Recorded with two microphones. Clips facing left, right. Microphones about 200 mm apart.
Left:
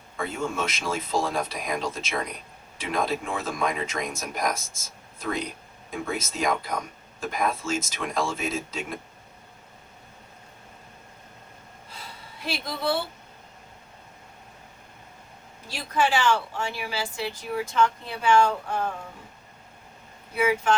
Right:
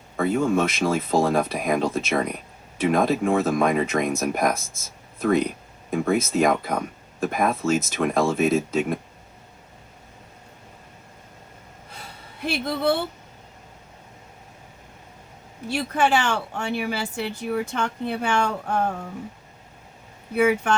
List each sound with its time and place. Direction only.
0.2 s a woman's voice: 55° right (ahead or behind)
12.4 s a woman's voice: 60° right (ahead or behind)
15.7 s a woman's voice: 60° right (ahead or behind)
20.3 s a woman's voice: 55° right (ahead or behind)